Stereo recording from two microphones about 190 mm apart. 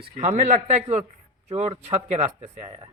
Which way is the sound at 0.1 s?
40° right (ahead or behind).